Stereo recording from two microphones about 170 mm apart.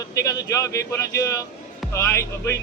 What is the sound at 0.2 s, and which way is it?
Speech, 20° left (ahead or behind).